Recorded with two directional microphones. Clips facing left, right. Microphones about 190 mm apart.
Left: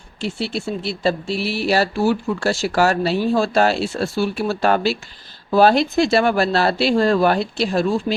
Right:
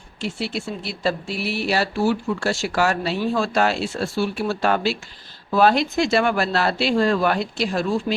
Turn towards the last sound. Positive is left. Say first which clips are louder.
# left 3 dB
turn(degrees=30)  # may be behind; listen again after turning